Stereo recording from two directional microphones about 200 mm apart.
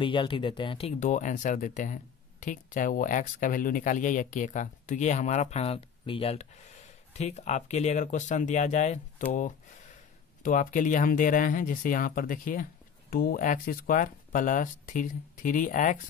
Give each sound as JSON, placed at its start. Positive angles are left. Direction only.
{"t": 0.0, "sound": "speech", "side_deg": 25}
{"t": 10.4, "sound": "speech", "side_deg": 40}